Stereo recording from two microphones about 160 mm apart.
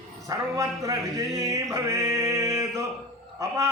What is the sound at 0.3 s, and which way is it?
Music, 20° right (ahead or behind).